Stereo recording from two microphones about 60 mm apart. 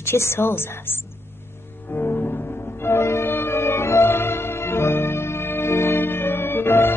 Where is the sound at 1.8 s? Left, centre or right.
Left.